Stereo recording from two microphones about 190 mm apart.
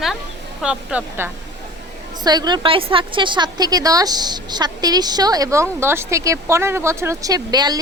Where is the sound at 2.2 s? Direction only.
20° right (ahead or behind).